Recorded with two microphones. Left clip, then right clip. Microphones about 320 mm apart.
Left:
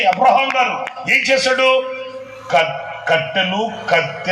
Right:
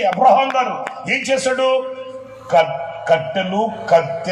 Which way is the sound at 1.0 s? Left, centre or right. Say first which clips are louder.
Left 4 dB; right.